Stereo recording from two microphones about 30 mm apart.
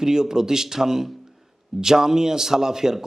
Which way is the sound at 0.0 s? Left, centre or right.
Centre.